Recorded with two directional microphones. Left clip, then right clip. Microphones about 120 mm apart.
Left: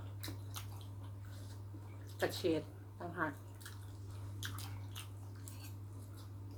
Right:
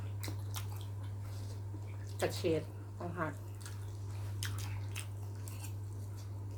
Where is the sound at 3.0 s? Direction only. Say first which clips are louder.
Right 2 dB; 15° left (ahead or behind).